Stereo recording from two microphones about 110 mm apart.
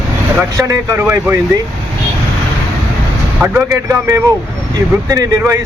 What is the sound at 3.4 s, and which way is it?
Speech, 25° right (ahead or behind).